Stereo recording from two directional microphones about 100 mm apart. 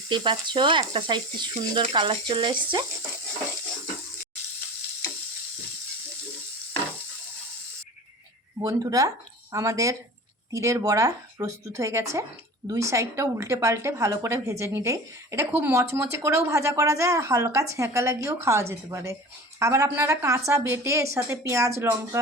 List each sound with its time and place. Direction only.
0.1 s speech: 50° right (ahead or behind)
1.8 s stir: 55° right (ahead or behind)
8.6 s a woman's voice: 35° right (ahead or behind)